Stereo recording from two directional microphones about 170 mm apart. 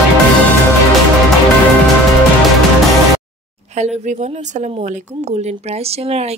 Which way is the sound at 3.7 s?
45° right (ahead or behind).